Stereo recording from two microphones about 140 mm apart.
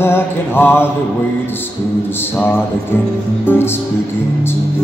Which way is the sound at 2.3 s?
15° left (ahead or behind).